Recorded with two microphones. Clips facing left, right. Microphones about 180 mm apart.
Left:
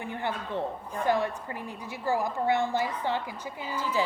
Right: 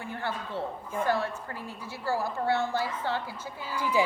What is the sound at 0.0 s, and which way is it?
A woman's voice, 20° left (ahead or behind).